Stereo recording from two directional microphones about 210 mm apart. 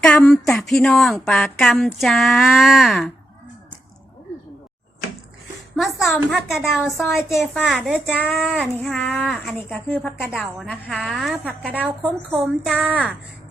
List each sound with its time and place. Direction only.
0.0 s a child's voice: 10° left (ahead or behind)
5.7 s a child's voice: centre (ahead or behind)